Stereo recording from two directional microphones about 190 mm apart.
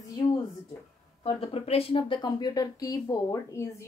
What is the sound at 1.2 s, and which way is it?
Speech, 30° left (ahead or behind).